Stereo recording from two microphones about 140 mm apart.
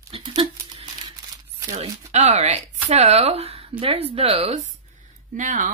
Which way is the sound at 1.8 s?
45° right (ahead or behind).